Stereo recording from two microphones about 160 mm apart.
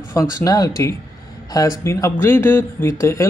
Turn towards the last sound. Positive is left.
turn(degrees=20)  # may be behind; listen again after turning